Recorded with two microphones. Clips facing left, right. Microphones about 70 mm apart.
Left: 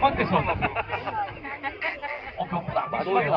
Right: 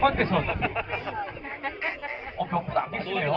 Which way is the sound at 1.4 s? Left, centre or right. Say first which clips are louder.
Left 1 dB; centre.